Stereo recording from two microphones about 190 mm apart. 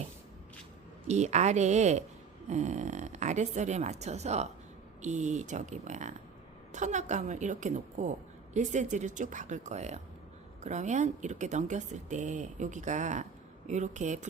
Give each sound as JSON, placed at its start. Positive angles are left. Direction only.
{"t": 1.0, "sound": "speech", "side_deg": -35}